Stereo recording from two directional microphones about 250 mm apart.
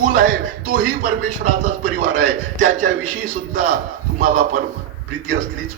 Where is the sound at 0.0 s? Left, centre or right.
Right.